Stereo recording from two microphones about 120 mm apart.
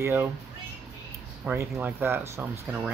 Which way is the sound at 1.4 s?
15° right (ahead or behind).